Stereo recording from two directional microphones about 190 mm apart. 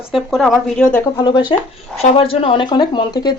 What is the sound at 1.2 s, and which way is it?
Speech, 20° left (ahead or behind).